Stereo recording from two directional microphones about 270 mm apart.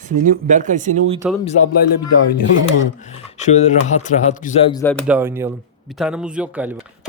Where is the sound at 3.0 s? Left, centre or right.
Left; by 5.0 s centre.